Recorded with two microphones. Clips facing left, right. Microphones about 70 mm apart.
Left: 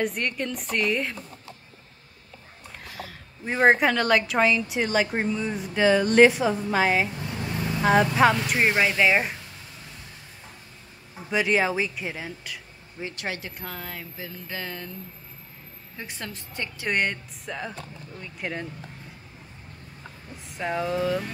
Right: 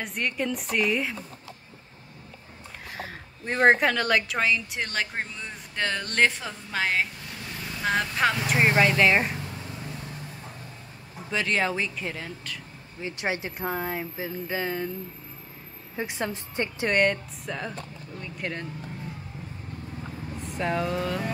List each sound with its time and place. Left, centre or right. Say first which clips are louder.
0.0 s speech: left 2 dB; centre
2.9 s a sound: right 3 dB; right
3.4 s speech: left 1 dB; centre
11.2 s speech: left 3 dB; centre
13.1 s speech: right 6 dB; right
16.0 s speech: right 7 dB; right
16.9 s speech: right 3 dB; centre
20.4 s speech: even; centre